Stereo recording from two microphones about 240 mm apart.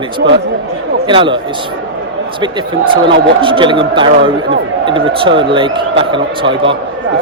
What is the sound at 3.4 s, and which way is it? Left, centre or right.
Speech, right.